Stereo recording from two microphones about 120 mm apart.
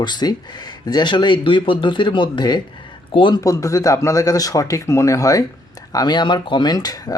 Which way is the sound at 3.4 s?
25° left (ahead or behind).